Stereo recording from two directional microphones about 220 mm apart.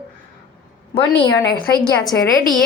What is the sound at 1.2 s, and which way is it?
Speech, 20° left (ahead or behind).